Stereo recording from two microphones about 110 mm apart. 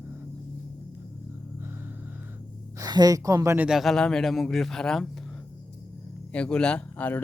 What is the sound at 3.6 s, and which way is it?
Speech, centre (ahead or behind).